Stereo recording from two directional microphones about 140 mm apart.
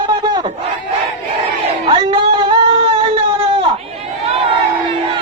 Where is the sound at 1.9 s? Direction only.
40° right (ahead or behind).